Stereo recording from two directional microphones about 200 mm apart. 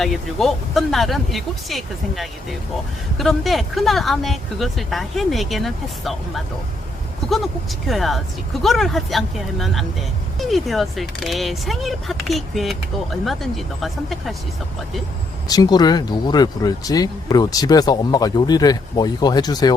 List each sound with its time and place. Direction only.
0.0 s speech: centre (ahead or behind)
15.4 s speech: 20° left (ahead or behind)